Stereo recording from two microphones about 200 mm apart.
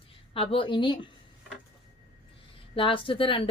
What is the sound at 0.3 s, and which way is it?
Speech, 25° left (ahead or behind).